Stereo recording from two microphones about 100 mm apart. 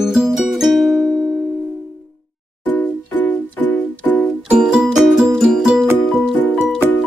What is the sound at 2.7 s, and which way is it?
Music, 20° left (ahead or behind).